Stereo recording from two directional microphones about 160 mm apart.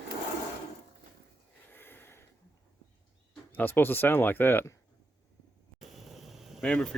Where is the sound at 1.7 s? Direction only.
15° left (ahead or behind).